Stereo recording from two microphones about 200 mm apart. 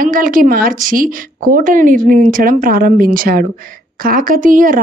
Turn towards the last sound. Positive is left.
turn(degrees=-45)  # may be behind; listen again after turning